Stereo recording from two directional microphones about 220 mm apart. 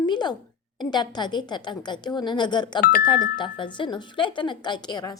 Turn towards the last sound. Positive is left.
turn(degrees=20)  # may be behind; listen again after turning